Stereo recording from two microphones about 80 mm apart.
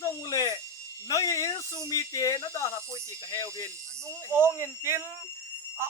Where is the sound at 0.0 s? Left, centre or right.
Left.